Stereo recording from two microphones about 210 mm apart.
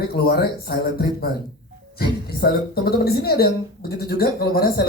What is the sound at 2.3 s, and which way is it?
Speech, 45° left (ahead or behind).